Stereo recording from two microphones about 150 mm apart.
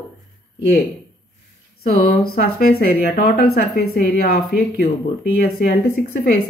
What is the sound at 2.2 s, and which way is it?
Speech, 80° left.